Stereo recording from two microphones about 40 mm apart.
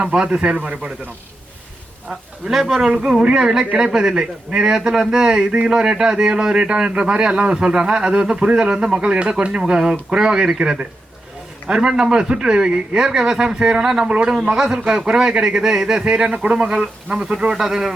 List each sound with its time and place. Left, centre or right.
0.0 s a man's voice: right
0.3 s a man's voice: right
2.0 s a man's voice: centre; by 14.5 s right
14.5 s a man's voice: centre